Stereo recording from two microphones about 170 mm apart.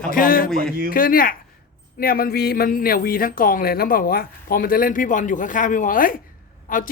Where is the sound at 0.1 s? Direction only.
55° left (ahead or behind).